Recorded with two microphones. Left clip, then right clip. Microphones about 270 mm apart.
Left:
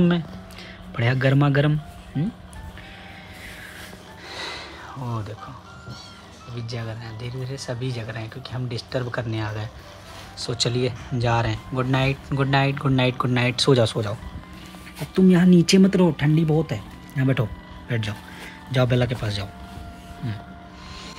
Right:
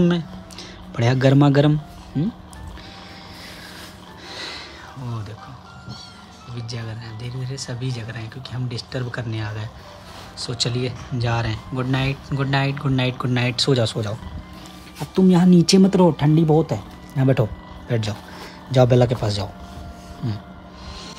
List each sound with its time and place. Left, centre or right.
0.9 s speech: centre
4.3 s music: centre
6.5 s speech: centre
15.1 s speech: centre